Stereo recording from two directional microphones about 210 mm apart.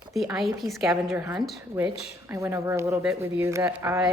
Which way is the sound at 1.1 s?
15° right (ahead or behind).